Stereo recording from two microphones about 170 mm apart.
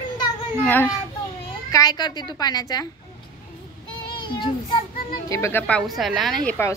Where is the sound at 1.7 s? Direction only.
20° left (ahead or behind).